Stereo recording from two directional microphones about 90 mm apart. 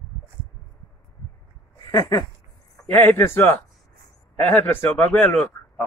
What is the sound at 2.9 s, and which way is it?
Speech, 20° left (ahead or behind).